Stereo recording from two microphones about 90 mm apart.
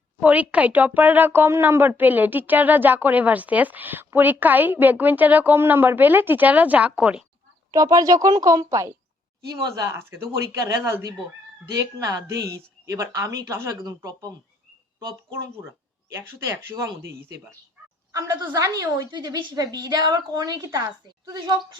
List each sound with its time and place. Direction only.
0.2 s speech: 15° right (ahead or behind)
7.7 s speech: 40° right (ahead or behind)
13.8 s a woman's voice: 45° right (ahead or behind)
16.3 s a woman's voice: 25° right (ahead or behind)